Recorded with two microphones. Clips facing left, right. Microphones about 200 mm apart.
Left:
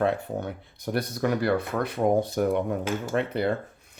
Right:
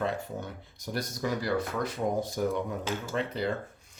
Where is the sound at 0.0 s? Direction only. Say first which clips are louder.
Left 6 dB; 60° left (ahead or behind).